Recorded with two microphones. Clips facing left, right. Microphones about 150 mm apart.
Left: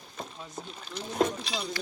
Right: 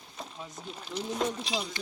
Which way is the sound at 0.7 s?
15° right (ahead or behind).